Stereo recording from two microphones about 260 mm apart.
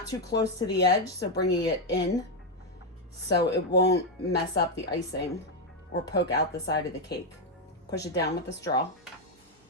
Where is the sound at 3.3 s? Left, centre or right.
Left.